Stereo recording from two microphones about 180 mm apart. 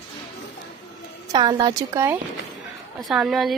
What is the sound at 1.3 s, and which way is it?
Speech, 20° right (ahead or behind).